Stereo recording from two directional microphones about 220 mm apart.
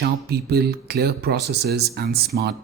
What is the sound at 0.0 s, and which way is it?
Speech, 45° right (ahead or behind).